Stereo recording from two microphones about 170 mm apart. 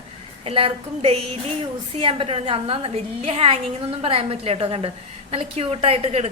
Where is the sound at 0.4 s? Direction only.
35° right (ahead or behind).